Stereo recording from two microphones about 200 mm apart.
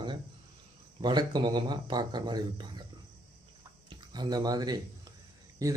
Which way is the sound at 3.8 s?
20° right (ahead or behind).